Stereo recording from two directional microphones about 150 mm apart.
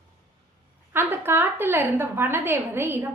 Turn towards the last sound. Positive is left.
turn(degrees=-15)  # may be behind; listen again after turning